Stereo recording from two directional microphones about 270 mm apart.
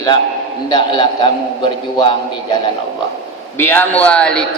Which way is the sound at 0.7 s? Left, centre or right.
Centre.